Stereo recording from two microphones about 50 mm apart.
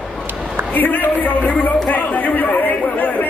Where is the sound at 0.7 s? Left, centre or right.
Left.